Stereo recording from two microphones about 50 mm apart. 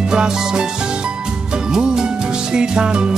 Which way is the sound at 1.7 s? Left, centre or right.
Centre.